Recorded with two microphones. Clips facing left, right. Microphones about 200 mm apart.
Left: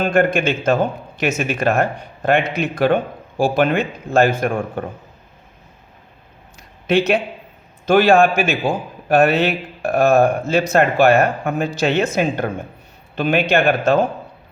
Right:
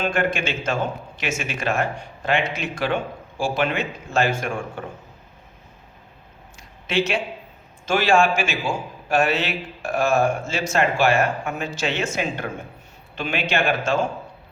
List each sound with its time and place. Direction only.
0.0 s a man's voice: 55° left (ahead or behind)
6.6 s a sound: 60° left (ahead or behind)
7.9 s a man's voice: 60° left (ahead or behind)
13.1 s a man's voice: 55° left (ahead or behind)